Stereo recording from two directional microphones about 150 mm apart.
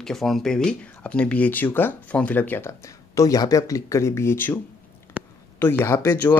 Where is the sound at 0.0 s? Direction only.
Centre (ahead or behind).